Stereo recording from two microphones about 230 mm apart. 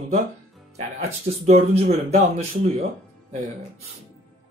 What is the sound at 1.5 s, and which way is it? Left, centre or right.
Speech, right.